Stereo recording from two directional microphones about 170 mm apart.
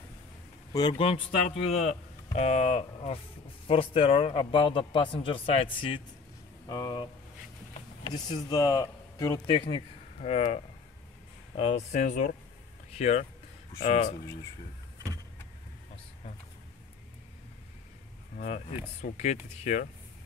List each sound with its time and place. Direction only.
0.7 s a man's voice: 30° left (ahead or behind)
9.6 s speech: 35° left (ahead or behind)
18.9 s speech: 40° left (ahead or behind)